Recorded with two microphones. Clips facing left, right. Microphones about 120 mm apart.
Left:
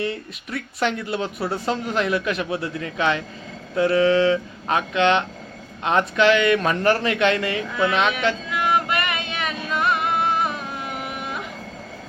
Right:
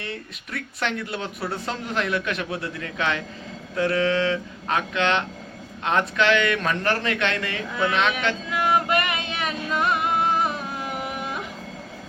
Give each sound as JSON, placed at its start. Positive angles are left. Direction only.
{"t": 0.0, "sound": "speech", "side_deg": 5}
{"t": 8.4, "sound": "music", "side_deg": -35}